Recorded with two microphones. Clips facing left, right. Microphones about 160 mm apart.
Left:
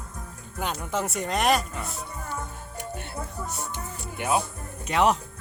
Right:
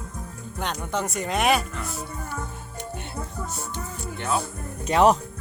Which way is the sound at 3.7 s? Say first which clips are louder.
Right 2 dB; 15° left (ahead or behind).